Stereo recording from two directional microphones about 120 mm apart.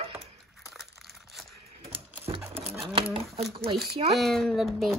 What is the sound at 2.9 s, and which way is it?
Speech, 45° right (ahead or behind).